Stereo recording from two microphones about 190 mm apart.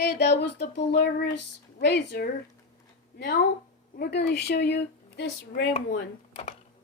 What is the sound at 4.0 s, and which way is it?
Speech, 60° left (ahead or behind).